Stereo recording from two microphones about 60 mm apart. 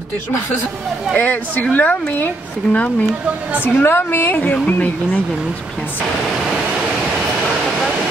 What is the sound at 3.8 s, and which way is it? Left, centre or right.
A woman's voice, left.